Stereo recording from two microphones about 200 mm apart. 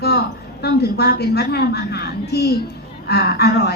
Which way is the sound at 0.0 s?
55° left (ahead or behind).